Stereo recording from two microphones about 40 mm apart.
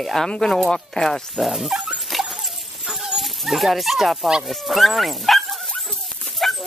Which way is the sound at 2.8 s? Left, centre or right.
Centre.